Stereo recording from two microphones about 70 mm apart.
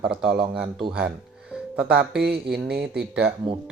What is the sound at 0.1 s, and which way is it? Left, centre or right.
Speech, centre.